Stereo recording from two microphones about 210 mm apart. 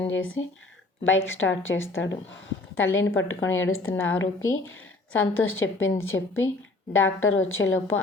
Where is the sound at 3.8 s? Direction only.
10° left (ahead or behind).